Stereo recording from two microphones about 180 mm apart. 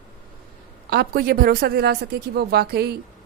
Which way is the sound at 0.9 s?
60° right (ahead or behind).